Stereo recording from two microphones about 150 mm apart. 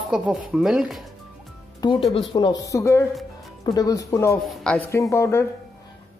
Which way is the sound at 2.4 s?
25° left (ahead or behind).